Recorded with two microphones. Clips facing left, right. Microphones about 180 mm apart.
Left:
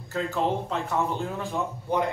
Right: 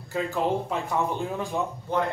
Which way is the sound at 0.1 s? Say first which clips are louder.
Right 1 dB; 10° right (ahead or behind).